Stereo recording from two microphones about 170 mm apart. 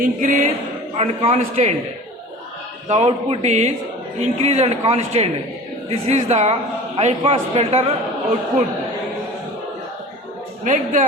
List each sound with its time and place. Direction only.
0.0 s speech: 50° right (ahead or behind)
0.9 s a man's voice: 40° right (ahead or behind)
2.9 s a man's voice: 40° right (ahead or behind)
10.6 s a man's voice: 45° right (ahead or behind)